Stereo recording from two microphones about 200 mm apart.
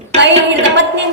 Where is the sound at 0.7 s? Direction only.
65° right (ahead or behind).